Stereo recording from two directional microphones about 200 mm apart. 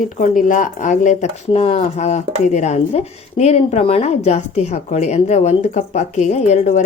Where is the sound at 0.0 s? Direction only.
40° left (ahead or behind).